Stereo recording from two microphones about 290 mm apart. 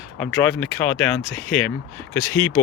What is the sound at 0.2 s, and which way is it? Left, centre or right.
Speech, centre.